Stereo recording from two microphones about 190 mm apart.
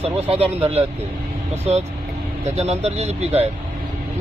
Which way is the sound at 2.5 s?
35° right (ahead or behind).